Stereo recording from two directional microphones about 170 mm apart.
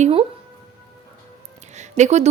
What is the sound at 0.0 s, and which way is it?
Music, 35° right (ahead or behind).